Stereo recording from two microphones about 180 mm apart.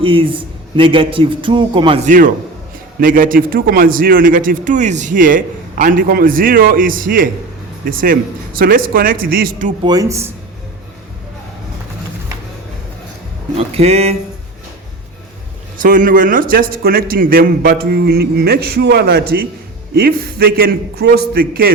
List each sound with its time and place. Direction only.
0.0 s a man's voice: 30° right (ahead or behind)
2.0 s a man's voice: 50° right (ahead or behind)
9.8 s speech: 20° right (ahead or behind)
13.6 s speech: 35° right (ahead or behind)
15.8 s a man's voice: 50° right (ahead or behind)